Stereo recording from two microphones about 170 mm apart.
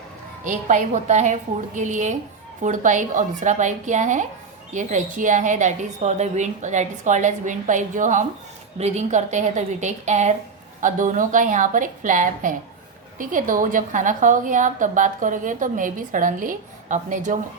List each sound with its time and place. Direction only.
0.4 s a woman's voice: 45° right (ahead or behind)